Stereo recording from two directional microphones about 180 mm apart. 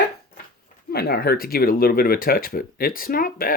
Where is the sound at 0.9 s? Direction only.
60° left (ahead or behind).